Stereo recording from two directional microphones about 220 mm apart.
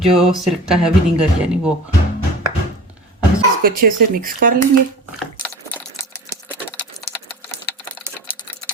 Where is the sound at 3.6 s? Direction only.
40° right (ahead or behind).